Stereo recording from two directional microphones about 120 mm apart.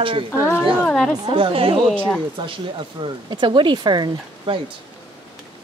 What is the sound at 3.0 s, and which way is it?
Speech, 45° right (ahead or behind).